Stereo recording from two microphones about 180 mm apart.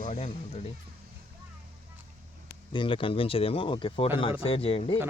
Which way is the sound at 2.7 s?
30° left (ahead or behind).